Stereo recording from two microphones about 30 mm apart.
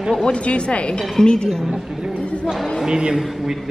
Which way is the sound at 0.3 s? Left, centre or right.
Left.